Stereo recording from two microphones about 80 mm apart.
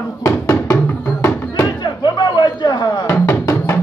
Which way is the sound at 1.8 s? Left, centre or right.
Left.